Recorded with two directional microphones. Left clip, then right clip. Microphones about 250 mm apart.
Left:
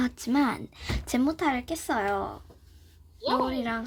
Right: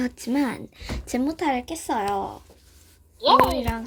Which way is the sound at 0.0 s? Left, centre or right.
Centre.